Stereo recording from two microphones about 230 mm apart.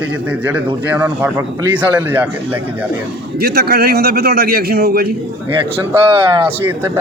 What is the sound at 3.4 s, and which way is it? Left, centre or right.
Speech, right.